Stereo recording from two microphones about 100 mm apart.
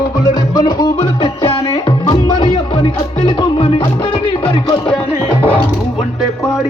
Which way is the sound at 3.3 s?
65° left (ahead or behind).